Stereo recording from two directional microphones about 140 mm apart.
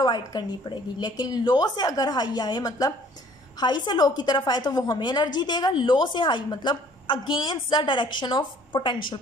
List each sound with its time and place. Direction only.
0.0 s a woman's voice: 30° left (ahead or behind)